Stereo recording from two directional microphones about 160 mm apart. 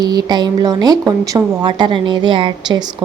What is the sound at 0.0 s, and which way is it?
Speech, 25° right (ahead or behind).